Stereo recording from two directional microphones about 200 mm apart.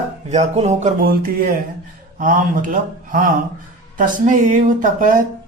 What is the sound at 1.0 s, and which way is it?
A man's voice, 45° right (ahead or behind).